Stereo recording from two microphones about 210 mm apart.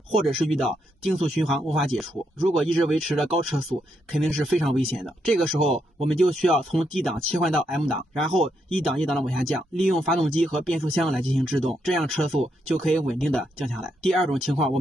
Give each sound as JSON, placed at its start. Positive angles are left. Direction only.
{"t": 0.3, "sound": "speech", "side_deg": 0}